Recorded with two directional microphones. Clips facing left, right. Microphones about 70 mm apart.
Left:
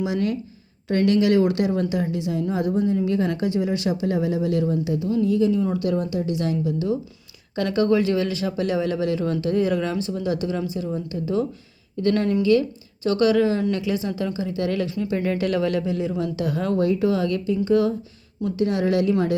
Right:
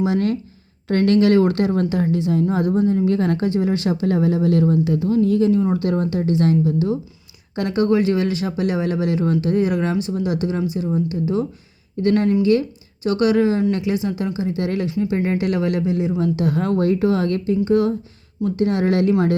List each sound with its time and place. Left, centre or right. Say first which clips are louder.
0.0 s a woman's voice: right 4 dB; right
2.9 s a woman's voice: right 4 dB; right